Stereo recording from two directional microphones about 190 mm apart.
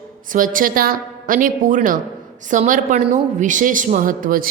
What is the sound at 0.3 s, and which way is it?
A woman's voice, 45° right (ahead or behind).